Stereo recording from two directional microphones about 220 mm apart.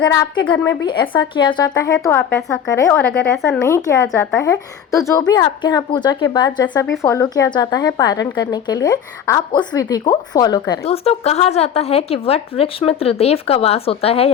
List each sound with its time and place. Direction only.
0.0 s a woman's voice: 20° left (ahead or behind)